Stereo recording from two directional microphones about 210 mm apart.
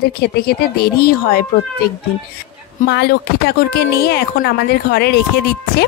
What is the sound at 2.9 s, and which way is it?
A woman's voice, 50° left (ahead or behind).